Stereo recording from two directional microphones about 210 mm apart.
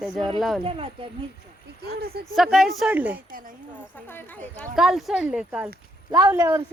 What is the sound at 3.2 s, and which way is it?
Speech, 40° right (ahead or behind).